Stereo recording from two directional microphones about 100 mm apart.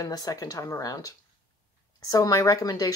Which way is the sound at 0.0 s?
35° left (ahead or behind).